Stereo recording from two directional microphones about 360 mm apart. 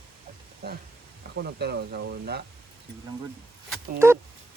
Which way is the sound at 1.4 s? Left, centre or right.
Right.